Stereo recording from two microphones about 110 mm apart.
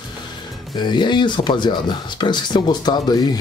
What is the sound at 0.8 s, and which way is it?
Speech, 45° left (ahead or behind).